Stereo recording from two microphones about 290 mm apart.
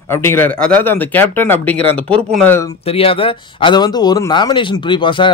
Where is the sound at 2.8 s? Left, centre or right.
Centre.